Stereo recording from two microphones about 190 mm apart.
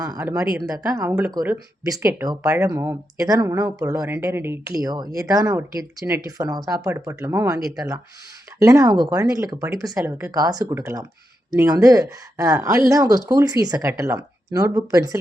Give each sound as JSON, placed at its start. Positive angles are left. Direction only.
{"t": 0.0, "sound": "speech", "side_deg": -20}